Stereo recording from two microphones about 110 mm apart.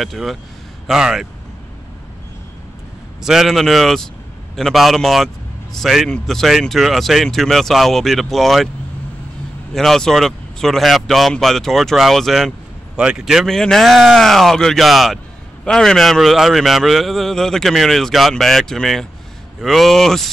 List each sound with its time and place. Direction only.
0.0 s speech: centre (ahead or behind)
3.2 s speech: 5° right (ahead or behind)
9.8 s speech: 5° left (ahead or behind)